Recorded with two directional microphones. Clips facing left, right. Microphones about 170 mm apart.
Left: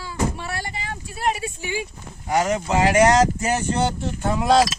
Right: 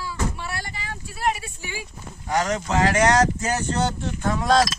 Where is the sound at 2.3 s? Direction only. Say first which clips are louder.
Left 2 dB; 10° left (ahead or behind).